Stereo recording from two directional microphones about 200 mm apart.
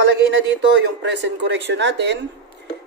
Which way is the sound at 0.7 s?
60° right (ahead or behind).